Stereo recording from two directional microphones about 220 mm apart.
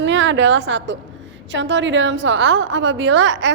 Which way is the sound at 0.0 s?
55° right (ahead or behind).